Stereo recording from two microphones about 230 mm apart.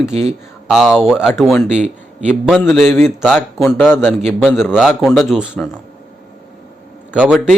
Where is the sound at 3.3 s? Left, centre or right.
Centre.